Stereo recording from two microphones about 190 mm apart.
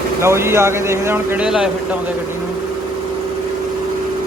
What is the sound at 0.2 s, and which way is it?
Speech, 15° right (ahead or behind).